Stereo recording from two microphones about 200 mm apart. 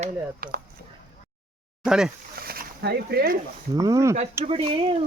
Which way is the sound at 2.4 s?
50° right (ahead or behind).